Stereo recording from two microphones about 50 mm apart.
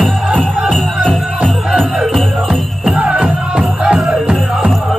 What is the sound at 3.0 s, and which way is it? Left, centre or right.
Music, right.